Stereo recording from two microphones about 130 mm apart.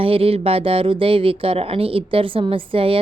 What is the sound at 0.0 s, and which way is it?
Speech, 45° right (ahead or behind).